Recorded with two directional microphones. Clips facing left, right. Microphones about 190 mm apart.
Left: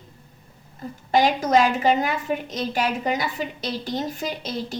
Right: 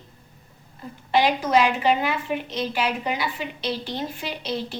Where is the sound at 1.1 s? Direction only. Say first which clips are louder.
Left 1 dB; 40° left (ahead or behind).